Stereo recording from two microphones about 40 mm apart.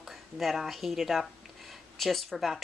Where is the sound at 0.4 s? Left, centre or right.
Centre.